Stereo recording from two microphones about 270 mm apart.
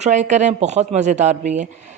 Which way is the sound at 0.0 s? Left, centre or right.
Right.